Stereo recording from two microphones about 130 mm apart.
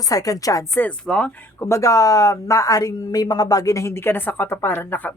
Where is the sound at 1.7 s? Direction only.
25° left (ahead or behind).